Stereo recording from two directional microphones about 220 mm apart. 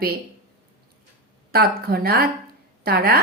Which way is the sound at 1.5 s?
45° right (ahead or behind).